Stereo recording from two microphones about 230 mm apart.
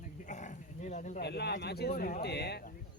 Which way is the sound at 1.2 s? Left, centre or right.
Left.